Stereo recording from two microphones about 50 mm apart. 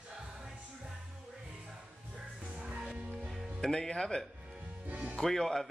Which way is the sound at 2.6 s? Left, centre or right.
Centre.